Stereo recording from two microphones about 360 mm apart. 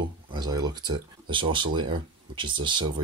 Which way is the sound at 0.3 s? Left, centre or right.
Centre.